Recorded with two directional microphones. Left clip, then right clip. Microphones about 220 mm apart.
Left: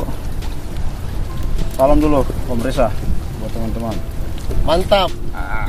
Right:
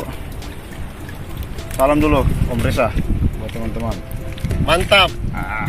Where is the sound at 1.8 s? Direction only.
25° right (ahead or behind).